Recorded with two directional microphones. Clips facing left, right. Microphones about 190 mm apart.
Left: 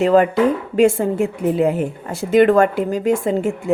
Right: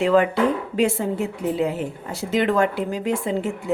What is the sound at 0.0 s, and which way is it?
A woman's voice, 45° left (ahead or behind).